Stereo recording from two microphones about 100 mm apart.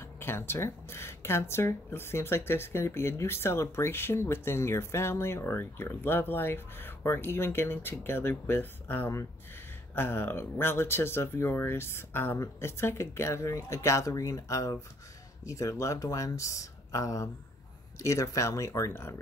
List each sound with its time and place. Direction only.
0.2 s speech: 25° left (ahead or behind)